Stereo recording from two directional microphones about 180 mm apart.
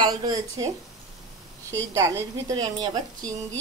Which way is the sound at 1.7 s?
15° right (ahead or behind).